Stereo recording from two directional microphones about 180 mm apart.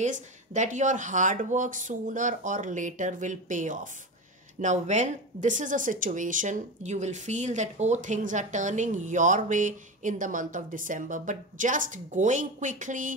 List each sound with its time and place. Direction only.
0.0 s a woman's voice: 45° right (ahead or behind)